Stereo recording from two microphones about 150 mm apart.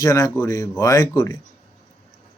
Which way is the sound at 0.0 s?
20° left (ahead or behind).